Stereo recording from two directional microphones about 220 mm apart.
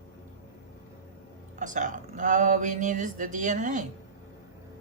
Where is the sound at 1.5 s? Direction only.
35° right (ahead or behind).